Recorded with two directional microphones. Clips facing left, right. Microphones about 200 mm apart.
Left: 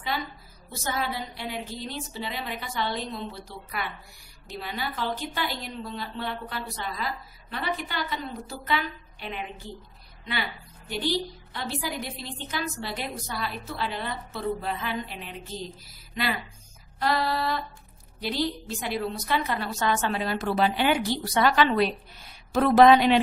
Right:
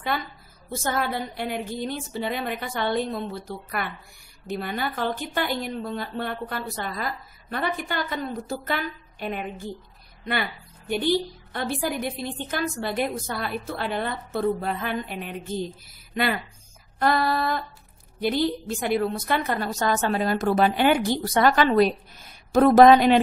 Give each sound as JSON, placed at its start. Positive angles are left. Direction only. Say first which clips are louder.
{"t": 0.1, "sound": "a woman's voice", "louder": "right 2 dB", "side_deg": -55}
{"t": 10.9, "sound": "a woman's voice", "louder": "right 5 dB", "side_deg": -55}